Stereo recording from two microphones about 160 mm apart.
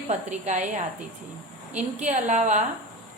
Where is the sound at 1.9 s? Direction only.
50° right (ahead or behind).